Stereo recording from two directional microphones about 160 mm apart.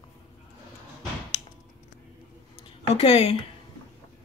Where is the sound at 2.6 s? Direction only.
40° left (ahead or behind).